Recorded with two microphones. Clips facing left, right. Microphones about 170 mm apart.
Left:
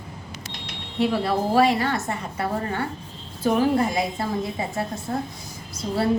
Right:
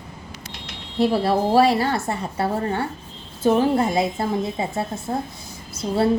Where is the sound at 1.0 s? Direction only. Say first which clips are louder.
Right 3 dB; 35° right (ahead or behind).